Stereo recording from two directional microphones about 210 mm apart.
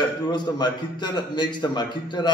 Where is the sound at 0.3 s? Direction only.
20° left (ahead or behind).